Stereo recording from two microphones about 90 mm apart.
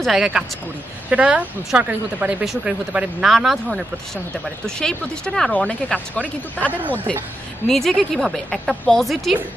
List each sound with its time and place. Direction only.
0.0 s a woman's voice: 5° right (ahead or behind)
2.4 s a woman's voice: 5° right (ahead or behind)
2.9 s speech: 15° right (ahead or behind)
3.3 s a woman's voice: centre (ahead or behind)
4.6 s speech: 5° left (ahead or behind)
7.6 s a woman's voice: 5° left (ahead or behind)